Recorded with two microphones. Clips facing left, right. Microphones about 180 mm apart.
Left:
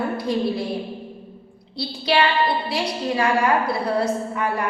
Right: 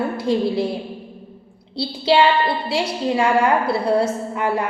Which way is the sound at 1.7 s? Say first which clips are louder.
Right 4 dB; 25° right (ahead or behind).